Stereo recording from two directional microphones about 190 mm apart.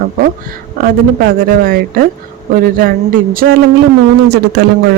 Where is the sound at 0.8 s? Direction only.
50° right (ahead or behind).